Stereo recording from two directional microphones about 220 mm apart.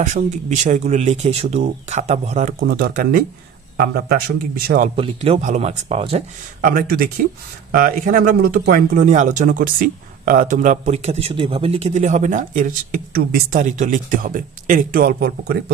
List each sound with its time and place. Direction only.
0.0 s a man's voice: 35° right (ahead or behind)
6.6 s a man's voice: 40° right (ahead or behind)